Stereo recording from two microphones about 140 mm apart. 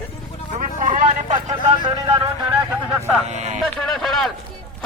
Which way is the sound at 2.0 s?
40° right (ahead or behind).